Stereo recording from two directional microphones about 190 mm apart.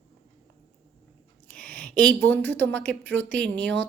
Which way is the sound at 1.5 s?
5° left (ahead or behind).